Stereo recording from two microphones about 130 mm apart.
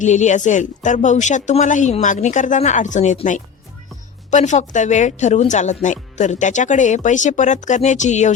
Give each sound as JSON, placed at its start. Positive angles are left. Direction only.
{"t": 0.0, "sound": "speech", "side_deg": 65}
{"t": 4.3, "sound": "speech", "side_deg": 65}